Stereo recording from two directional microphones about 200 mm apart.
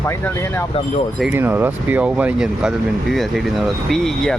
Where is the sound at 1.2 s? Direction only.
10° right (ahead or behind).